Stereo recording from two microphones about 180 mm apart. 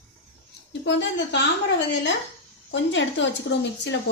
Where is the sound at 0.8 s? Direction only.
80° left.